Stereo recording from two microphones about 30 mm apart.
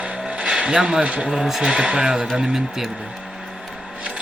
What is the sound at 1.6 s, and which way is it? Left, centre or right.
Speech, right.